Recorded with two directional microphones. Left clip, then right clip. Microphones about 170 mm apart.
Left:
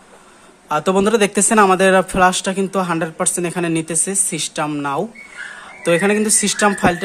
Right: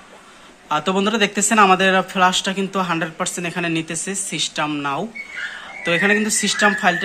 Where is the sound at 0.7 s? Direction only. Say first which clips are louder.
Left 4 dB; 55° left (ahead or behind).